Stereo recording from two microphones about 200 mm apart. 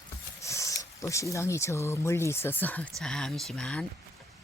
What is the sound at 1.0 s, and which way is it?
Speech, 15° left (ahead or behind).